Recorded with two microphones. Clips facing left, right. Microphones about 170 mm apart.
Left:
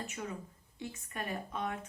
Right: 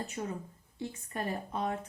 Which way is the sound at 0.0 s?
35° right (ahead or behind).